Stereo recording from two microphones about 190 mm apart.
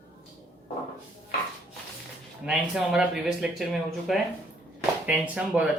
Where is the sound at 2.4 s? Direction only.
5° right (ahead or behind).